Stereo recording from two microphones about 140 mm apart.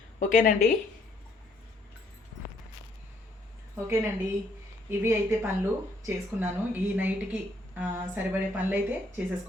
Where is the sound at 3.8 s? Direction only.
20° right (ahead or behind).